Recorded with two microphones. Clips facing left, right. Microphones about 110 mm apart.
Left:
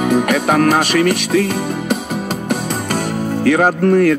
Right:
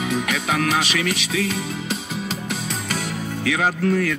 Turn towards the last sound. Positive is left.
turn(degrees=50)  # may be behind; listen again after turning